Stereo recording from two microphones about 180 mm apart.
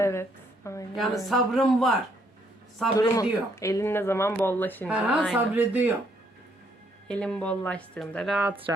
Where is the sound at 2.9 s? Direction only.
20° left (ahead or behind).